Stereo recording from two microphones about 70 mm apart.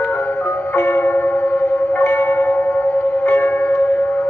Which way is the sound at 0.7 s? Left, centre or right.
Left.